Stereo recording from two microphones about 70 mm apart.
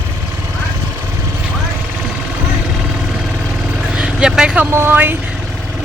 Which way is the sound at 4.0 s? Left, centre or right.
Centre.